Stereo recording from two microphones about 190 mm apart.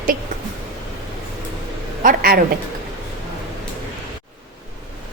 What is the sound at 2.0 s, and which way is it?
Speech, 50° right (ahead or behind).